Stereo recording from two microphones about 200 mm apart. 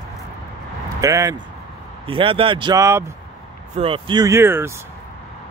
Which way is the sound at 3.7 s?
25° right (ahead or behind).